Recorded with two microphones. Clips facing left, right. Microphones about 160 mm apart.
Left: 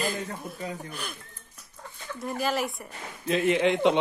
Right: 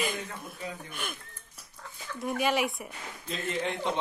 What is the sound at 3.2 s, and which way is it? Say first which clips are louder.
Speech: left 10 dB; 70° left (ahead or behind).